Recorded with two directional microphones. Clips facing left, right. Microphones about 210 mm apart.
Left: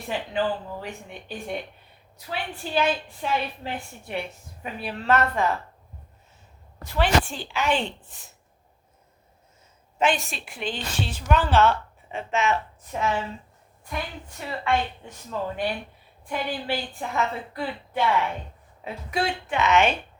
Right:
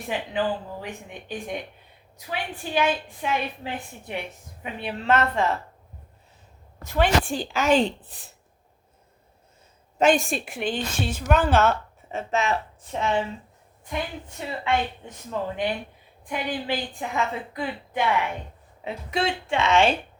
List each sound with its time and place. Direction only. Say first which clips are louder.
0.1 s a woman's voice: even; 15° right (ahead or behind)
2.1 s a woman's voice: right 1 dB; 15° right (ahead or behind)
6.9 s a woman's voice: right 1 dB; 45° right (ahead or behind)
10.0 s a woman's voice: right 5 dB; 45° right (ahead or behind); by 20.0 s 30° right (ahead or behind)